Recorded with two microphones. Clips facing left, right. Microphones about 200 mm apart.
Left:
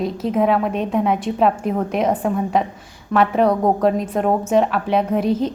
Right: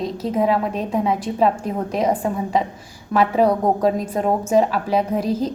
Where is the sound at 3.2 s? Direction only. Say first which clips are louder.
Left 1 dB; centre (ahead or behind).